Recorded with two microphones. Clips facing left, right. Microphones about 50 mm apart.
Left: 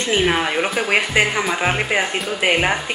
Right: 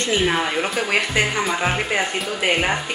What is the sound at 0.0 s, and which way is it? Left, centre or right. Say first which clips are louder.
Speech: left 2 dB; centre.